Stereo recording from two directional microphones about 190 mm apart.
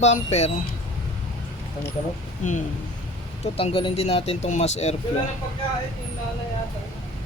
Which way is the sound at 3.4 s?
30° left (ahead or behind).